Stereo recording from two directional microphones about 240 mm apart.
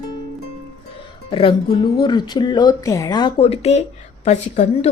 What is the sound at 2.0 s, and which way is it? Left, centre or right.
A woman's voice, centre.